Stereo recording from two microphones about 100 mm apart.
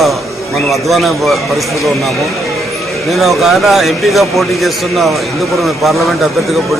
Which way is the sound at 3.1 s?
Centre (ahead or behind).